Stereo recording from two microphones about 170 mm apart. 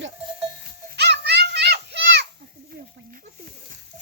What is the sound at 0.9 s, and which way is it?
Children playing, 80° right.